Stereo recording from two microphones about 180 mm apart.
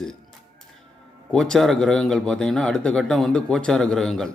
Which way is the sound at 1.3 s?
Centre (ahead or behind).